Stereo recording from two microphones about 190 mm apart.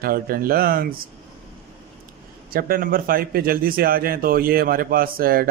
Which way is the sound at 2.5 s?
50° right (ahead or behind).